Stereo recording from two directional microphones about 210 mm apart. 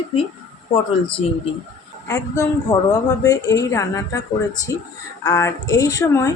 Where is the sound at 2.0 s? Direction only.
15° left (ahead or behind).